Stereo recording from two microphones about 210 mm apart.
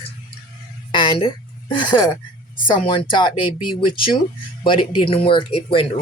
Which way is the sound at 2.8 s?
25° left (ahead or behind).